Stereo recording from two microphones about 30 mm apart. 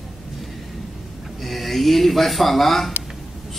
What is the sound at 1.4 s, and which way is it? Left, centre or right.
A man's voice, centre.